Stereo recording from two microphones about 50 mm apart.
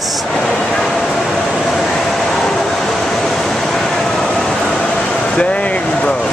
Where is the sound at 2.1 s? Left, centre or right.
Centre.